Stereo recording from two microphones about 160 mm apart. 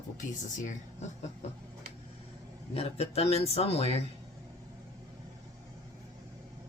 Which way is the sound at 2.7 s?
40° left (ahead or behind).